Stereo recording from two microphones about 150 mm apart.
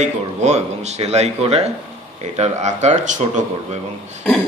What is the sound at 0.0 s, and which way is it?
Speech, 50° right (ahead or behind).